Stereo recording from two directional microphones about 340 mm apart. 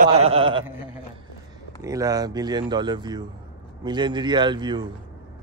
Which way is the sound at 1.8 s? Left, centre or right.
Centre.